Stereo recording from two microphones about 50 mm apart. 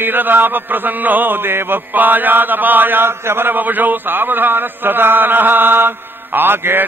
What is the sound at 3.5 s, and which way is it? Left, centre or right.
Mantra, right.